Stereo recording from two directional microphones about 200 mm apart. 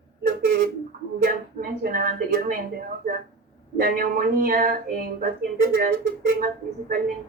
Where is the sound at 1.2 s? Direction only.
45° right (ahead or behind).